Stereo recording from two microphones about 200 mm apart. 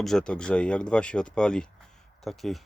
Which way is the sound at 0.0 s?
Centre (ahead or behind).